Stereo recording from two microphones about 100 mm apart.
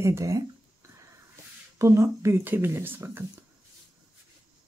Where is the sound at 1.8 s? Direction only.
30° right (ahead or behind).